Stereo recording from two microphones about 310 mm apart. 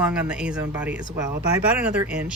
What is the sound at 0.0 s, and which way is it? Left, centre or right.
Speech, centre.